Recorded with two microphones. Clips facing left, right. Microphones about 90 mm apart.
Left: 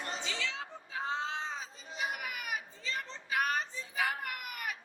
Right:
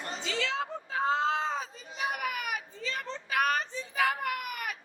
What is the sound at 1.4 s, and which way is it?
Children playing, 55° right (ahead or behind).